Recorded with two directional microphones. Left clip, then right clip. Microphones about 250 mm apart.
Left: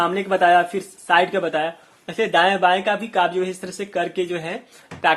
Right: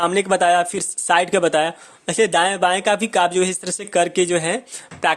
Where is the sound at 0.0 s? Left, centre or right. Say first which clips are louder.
Right 1 dB; right.